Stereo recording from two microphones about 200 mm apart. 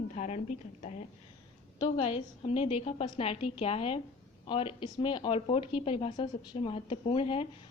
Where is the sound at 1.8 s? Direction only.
30° left (ahead or behind).